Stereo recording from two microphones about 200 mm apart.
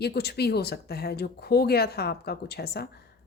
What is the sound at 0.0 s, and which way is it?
A woman's voice, 55° left (ahead or behind).